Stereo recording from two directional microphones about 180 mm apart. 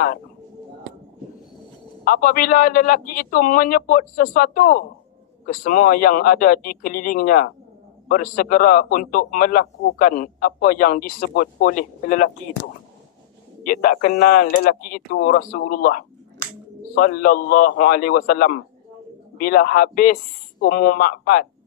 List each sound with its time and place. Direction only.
2.0 s a man's voice: 55° left (ahead or behind)
13.7 s a man's voice: 50° left (ahead or behind)